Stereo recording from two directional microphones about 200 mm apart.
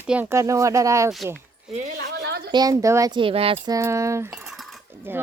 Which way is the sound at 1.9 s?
55° right (ahead or behind).